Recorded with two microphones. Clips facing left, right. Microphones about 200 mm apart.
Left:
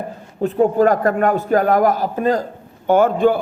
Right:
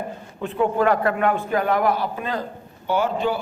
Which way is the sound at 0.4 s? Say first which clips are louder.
Left 6 dB; 40° left (ahead or behind).